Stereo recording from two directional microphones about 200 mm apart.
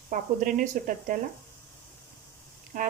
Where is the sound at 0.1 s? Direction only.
40° right (ahead or behind).